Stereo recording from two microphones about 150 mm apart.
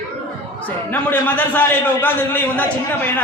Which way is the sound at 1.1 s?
10° left (ahead or behind).